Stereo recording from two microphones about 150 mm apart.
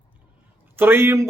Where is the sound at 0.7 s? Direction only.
15° right (ahead or behind).